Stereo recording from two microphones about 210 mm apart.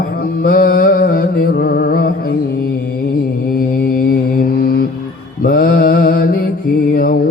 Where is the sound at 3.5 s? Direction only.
45° left (ahead or behind).